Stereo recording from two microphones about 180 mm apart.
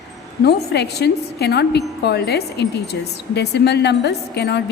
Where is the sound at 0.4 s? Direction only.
65° left (ahead or behind).